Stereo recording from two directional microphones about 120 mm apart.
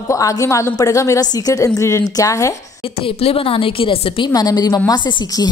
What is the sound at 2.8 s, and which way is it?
A woman's voice, 50° left (ahead or behind).